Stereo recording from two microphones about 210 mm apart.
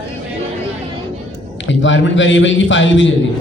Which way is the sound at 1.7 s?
60° left (ahead or behind).